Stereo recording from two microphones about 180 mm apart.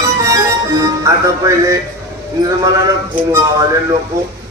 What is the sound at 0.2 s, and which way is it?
Music, 15° right (ahead or behind).